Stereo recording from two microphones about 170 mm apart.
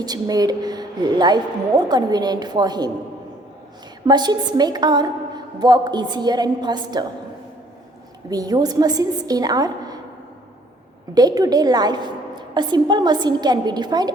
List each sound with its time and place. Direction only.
0.0 s a woman's voice: 25° right (ahead or behind)
4.0 s a woman's voice: 25° right (ahead or behind)
8.3 s a woman's voice: 20° right (ahead or behind)
11.1 s a woman's voice: 25° right (ahead or behind)